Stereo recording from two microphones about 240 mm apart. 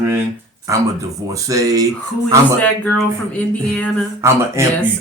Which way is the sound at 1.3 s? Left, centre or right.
Centre.